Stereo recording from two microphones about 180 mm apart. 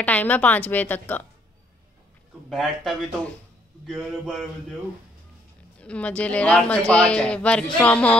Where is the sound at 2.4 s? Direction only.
Centre (ahead or behind).